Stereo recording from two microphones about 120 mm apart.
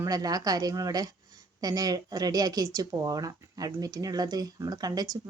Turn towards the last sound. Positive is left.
turn(degrees=-30)  # may be behind; listen again after turning